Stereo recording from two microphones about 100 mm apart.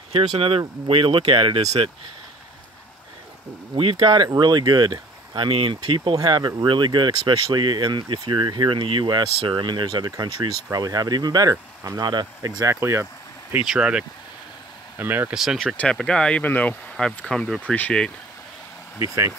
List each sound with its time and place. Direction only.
0.1 s speech: 70° right (ahead or behind)
4.0 s speech: 55° right (ahead or behind)
6.1 s speech: 45° right (ahead or behind)
13.0 s a sound: 15° right (ahead or behind)
13.7 s speech: 10° right (ahead or behind)
15.0 s speech: 20° right (ahead or behind)
15.3 s speech: centre (ahead or behind)
18.9 s speech: 30° right (ahead or behind)